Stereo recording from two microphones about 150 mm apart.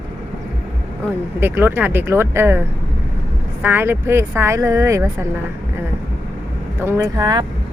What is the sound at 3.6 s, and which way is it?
Speech, 15° right (ahead or behind).